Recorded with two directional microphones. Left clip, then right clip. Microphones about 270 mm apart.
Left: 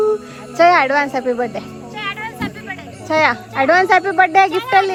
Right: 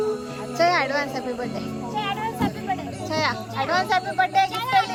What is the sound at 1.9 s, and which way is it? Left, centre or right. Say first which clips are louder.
Music: left 2 dB; right.